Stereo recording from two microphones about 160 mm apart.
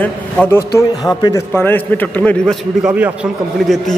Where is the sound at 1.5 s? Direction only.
10° left (ahead or behind).